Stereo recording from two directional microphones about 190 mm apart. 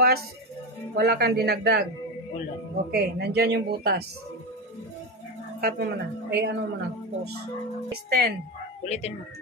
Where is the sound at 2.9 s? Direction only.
55° right (ahead or behind).